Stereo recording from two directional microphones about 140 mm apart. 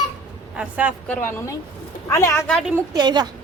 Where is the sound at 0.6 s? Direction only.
10° right (ahead or behind).